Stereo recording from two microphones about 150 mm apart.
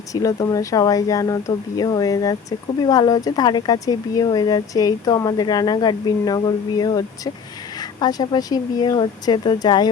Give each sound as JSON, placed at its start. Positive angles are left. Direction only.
{"t": 0.1, "sound": "speech", "side_deg": 20}